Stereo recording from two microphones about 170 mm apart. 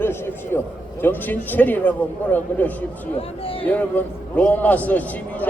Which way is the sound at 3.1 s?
35° left (ahead or behind).